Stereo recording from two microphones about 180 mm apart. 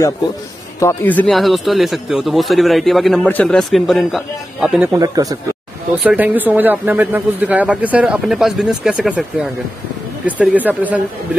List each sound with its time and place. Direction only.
0.7 s speech: 10° left (ahead or behind)
4.9 s speech: 20° right (ahead or behind)
6.0 s speech: 10° right (ahead or behind)